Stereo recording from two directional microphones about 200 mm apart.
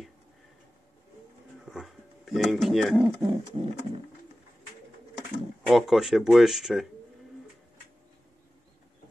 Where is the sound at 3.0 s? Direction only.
20° right (ahead or behind).